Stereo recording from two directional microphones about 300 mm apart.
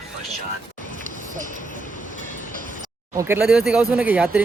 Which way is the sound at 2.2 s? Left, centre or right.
Left.